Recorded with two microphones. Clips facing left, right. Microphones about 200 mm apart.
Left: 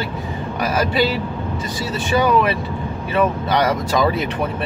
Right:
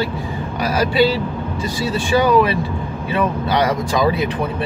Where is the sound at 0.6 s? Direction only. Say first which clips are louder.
Right 3 dB; 30° right (ahead or behind).